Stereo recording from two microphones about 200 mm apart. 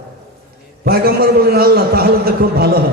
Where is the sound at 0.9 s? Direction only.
50° right (ahead or behind).